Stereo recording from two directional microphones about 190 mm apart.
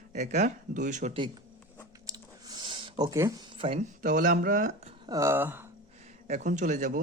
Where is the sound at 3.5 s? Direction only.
30° right (ahead or behind).